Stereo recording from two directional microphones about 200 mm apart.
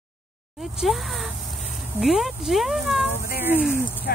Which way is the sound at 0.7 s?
Centre (ahead or behind).